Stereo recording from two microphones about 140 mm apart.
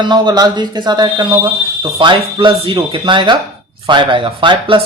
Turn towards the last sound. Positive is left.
turn(degrees=-35)  # may be behind; listen again after turning